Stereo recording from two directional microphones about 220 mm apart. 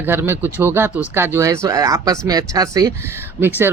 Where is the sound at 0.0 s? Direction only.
10° right (ahead or behind).